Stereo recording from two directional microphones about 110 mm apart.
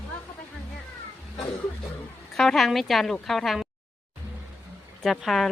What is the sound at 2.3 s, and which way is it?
Speech, 5° left (ahead or behind).